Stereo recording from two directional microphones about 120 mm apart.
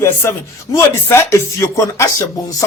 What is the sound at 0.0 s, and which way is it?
Speech, 20° left (ahead or behind).